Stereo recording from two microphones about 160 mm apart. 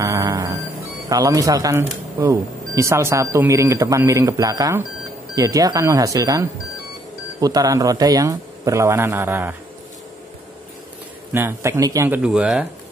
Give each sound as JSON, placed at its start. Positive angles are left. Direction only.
{"t": 0.0, "sound": "music", "side_deg": -20}
{"t": 1.0, "sound": "speech", "side_deg": -20}
{"t": 11.3, "sound": "speech", "side_deg": -15}
{"t": 12.2, "sound": "speech", "side_deg": -5}